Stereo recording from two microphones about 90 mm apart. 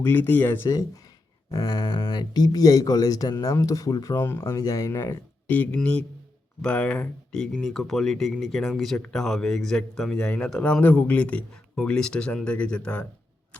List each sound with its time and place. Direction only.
0.0 s speech: 20° left (ahead or behind)
1.5 s speech: 45° left (ahead or behind)
5.5 s a man's voice: 15° left (ahead or behind)